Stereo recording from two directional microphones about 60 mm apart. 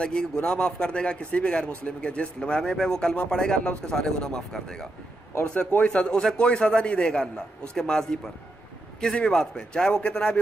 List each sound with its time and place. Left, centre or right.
0.0 s a man's voice: centre
5.4 s speech: left
5.9 s a man's voice: centre